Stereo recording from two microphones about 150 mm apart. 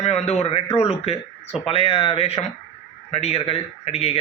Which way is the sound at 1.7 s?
40° left (ahead or behind).